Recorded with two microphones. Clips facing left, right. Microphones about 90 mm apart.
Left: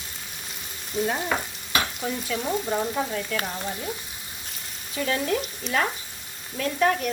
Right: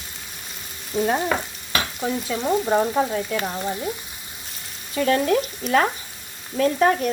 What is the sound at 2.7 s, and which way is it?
Speech, 35° right (ahead or behind).